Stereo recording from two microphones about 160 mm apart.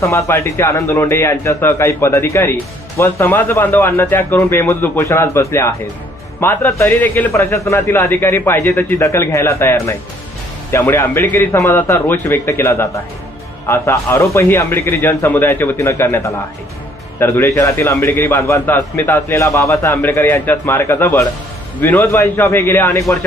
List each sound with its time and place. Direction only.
0.0 s a man's voice: 20° left (ahead or behind)